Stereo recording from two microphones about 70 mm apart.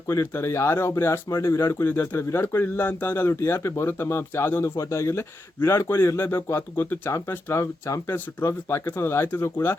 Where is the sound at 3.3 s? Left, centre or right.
Left.